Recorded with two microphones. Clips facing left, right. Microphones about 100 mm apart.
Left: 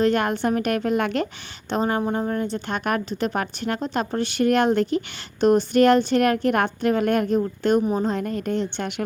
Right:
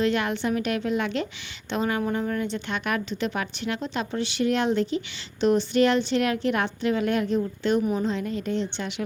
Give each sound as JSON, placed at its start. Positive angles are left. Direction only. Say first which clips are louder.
{"t": 0.0, "sound": "speech", "louder": "left 4 dB", "side_deg": 45}
{"t": 1.7, "sound": "speech", "louder": "left 3 dB", "side_deg": 35}